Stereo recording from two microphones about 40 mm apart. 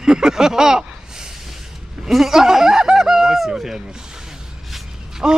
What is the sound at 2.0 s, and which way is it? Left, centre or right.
Speech, centre.